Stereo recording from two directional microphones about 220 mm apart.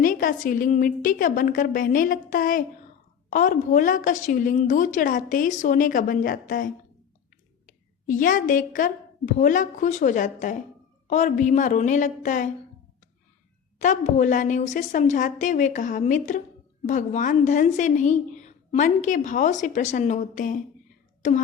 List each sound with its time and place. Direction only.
0.0 s a woman's voice: 40° left (ahead or behind)
7.7 s a woman's voice: 35° left (ahead or behind)
13.7 s a woman's voice: 35° left (ahead or behind)